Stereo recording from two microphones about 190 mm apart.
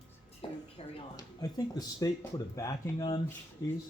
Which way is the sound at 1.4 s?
20° left (ahead or behind).